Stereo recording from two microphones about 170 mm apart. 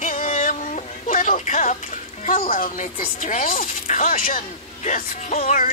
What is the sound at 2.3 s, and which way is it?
Speech, 55° left (ahead or behind).